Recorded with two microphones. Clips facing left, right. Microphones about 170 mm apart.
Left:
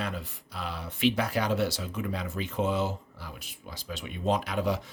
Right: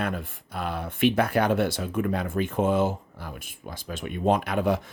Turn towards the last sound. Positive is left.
turn(degrees=-55)  # may be behind; listen again after turning